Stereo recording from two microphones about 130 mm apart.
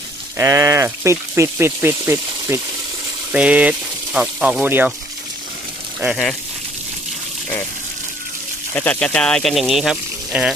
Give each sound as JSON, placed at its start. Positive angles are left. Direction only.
{"t": 0.3, "sound": "speech", "side_deg": -25}
{"t": 6.0, "sound": "speech", "side_deg": -10}
{"t": 8.7, "sound": "speech", "side_deg": 10}